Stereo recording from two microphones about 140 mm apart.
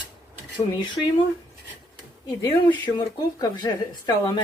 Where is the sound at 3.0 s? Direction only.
25° left (ahead or behind).